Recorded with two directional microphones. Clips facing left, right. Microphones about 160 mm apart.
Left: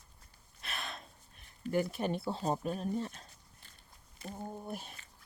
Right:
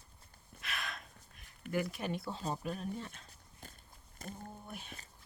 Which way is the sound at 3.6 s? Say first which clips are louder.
Right 13 dB; 45° right (ahead or behind).